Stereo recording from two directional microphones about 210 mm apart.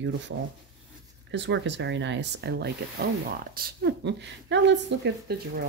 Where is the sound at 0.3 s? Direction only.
80° right.